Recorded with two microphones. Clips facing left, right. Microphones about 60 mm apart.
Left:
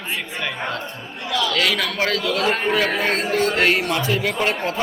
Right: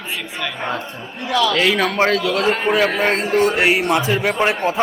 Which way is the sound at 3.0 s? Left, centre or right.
Right.